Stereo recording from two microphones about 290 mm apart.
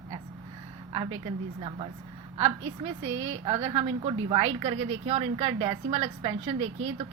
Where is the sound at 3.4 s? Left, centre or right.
Right.